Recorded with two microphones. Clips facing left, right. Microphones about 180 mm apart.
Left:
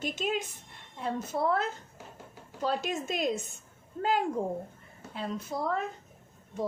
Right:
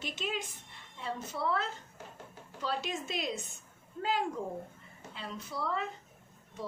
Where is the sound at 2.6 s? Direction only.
45° left (ahead or behind).